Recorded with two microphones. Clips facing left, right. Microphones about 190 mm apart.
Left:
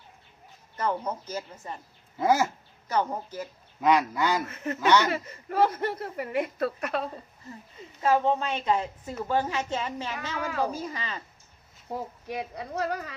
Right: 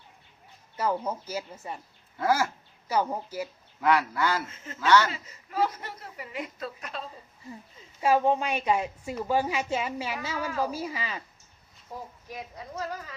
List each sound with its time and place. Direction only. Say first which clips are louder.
0.8 s a woman's voice: right 1 dB; 10° right (ahead or behind)
2.1 s speech: left 2 dB; 20° left (ahead or behind)
2.9 s a woman's voice: even; 10° right (ahead or behind)
3.8 s speech: left 1 dB; 20° left (ahead or behind)
4.4 s a woman's voice: left 11 dB; 65° left (ahead or behind)
4.8 s speech: even; 15° left (ahead or behind)
5.1 s a woman's voice: left 4 dB; 60° left (ahead or behind)
8.0 s a woman's voice: right 1 dB; 10° right (ahead or behind)
11.9 s speech: left 6 dB; 65° left (ahead or behind)